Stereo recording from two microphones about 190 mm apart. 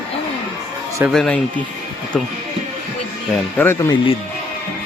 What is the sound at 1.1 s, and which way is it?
Speech, centre (ahead or behind).